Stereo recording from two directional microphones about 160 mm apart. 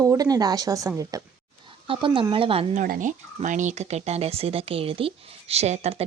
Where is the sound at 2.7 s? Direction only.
60° right (ahead or behind).